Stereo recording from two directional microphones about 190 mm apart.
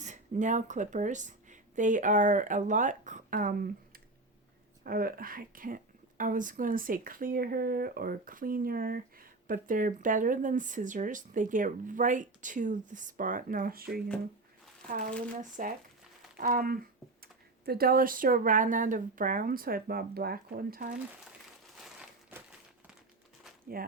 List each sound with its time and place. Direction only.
0.0 s speech: 40° right (ahead or behind)
21.9 s crumpling: 10° right (ahead or behind)
23.7 s speech: 50° right (ahead or behind)